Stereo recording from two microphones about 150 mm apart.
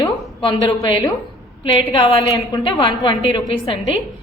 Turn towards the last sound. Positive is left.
turn(degrees=40)  # may be behind; listen again after turning